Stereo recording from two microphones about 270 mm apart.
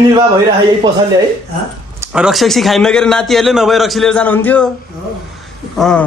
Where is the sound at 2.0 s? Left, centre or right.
Centre.